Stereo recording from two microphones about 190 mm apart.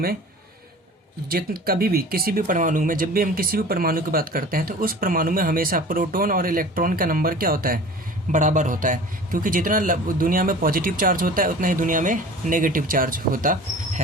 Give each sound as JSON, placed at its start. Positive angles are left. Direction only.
{"t": 1.3, "sound": "speech", "side_deg": -50}